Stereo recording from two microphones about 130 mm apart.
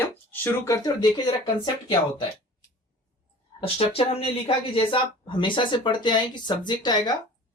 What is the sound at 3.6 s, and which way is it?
Speech, 45° left (ahead or behind).